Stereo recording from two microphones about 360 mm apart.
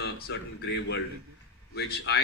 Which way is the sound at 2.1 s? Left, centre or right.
Left.